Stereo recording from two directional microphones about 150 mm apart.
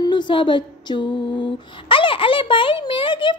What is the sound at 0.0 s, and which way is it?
Female singing, 30° left (ahead or behind).